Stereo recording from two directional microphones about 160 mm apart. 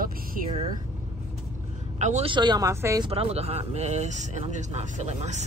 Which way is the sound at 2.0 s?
45° right (ahead or behind).